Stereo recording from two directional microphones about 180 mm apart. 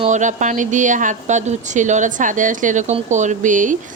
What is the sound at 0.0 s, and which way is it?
A woman's voice, 40° right (ahead or behind).